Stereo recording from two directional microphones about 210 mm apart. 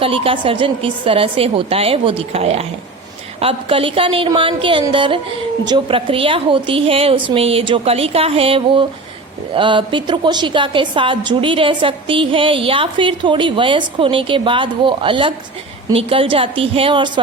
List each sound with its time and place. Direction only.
0.0 s a woman's voice: 25° right (ahead or behind)